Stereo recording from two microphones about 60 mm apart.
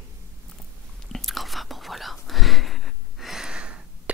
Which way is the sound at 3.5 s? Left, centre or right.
Centre.